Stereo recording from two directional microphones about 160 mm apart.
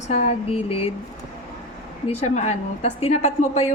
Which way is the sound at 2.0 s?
45° left (ahead or behind).